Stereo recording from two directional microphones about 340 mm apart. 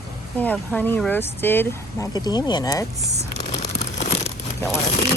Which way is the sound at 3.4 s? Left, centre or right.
Centre.